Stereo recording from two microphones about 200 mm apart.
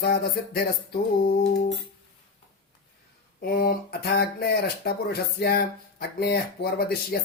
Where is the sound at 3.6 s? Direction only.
50° left (ahead or behind).